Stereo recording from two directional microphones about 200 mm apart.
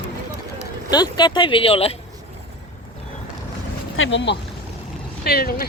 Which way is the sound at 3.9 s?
70° left (ahead or behind).